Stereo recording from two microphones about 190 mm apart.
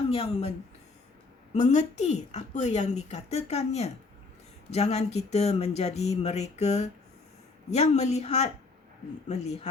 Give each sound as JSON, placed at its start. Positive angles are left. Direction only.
{"t": 0.1, "sound": "a woman's voice", "side_deg": 30}
{"t": 1.5, "sound": "a woman's voice", "side_deg": 35}